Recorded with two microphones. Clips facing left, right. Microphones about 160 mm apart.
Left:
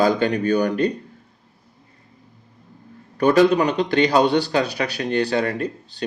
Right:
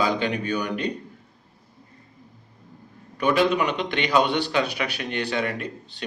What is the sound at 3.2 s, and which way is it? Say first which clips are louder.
Speech: left 6 dB; 40° left (ahead or behind).